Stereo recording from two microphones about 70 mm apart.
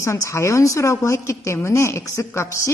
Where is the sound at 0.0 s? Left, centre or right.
Left.